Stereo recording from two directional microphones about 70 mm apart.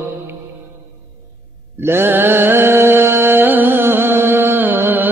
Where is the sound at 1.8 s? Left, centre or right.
Right.